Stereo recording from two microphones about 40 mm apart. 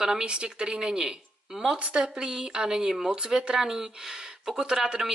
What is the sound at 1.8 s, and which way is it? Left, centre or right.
Speech, right.